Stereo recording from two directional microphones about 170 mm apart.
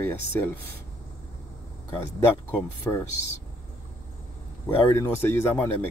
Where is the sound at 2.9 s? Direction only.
15° left (ahead or behind).